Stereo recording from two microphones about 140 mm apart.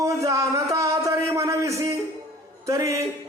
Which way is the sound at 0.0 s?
20° right (ahead or behind).